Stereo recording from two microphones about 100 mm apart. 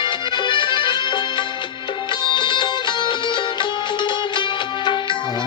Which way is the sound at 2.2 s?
50° left (ahead or behind).